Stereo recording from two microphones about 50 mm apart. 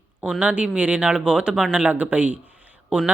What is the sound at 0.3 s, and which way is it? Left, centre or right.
Speech, right.